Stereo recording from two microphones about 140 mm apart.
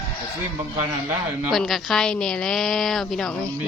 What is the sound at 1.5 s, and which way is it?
A woman's voice, centre (ahead or behind).